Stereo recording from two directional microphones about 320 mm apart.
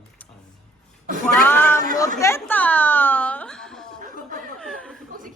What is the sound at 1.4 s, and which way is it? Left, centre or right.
Speech, centre.